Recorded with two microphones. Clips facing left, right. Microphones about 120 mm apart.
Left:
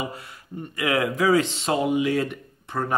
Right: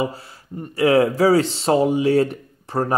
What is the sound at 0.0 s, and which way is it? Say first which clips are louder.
Speech: right 7 dB; 30° right (ahead or behind).